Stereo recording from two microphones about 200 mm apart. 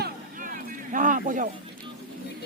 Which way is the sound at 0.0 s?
40° right (ahead or behind).